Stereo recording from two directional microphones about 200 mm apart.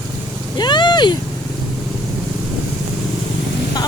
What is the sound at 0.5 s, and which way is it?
Vehicle, 20° left (ahead or behind).